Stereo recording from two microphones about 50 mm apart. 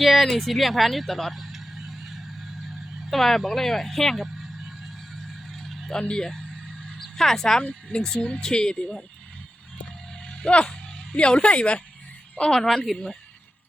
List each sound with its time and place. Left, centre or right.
0.0 s a woman's voice: centre
5.5 s vehicle: centre
5.9 s speech: centre
10.2 s a sound: left
11.1 s speech: left
12.4 s speech: centre